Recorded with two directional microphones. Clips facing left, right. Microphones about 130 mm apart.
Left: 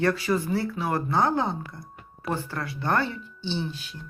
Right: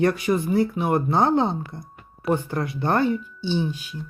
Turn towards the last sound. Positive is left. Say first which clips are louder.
# right 6 dB
turn(degrees=-10)  # may be behind; listen again after turning